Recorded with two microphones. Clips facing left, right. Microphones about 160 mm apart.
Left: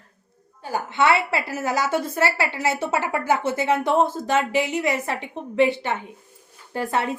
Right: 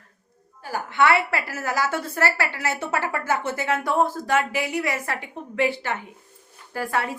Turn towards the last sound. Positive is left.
turn(degrees=25)  # may be behind; listen again after turning